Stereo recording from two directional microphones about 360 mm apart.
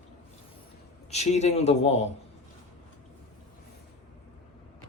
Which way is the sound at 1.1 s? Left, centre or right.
Centre.